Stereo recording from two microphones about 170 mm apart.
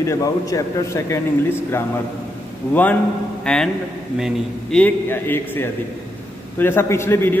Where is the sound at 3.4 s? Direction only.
5° left (ahead or behind).